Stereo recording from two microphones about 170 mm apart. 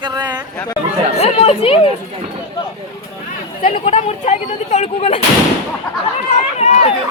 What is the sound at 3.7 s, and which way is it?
Speech, 40° left (ahead or behind).